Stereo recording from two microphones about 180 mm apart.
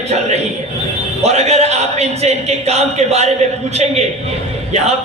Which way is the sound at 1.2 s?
35° right (ahead or behind).